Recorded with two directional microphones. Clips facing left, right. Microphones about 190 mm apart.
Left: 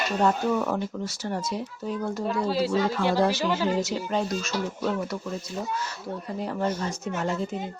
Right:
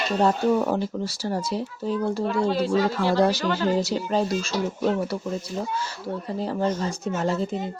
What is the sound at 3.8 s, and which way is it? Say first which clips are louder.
Speech: right 3 dB; 35° right (ahead or behind).